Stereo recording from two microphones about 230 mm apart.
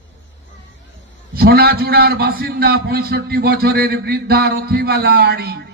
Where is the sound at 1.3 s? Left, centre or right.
Right.